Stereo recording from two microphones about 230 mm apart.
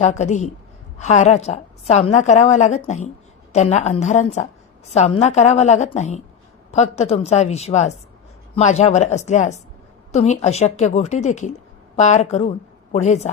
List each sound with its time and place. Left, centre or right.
0.0 s a woman's voice: left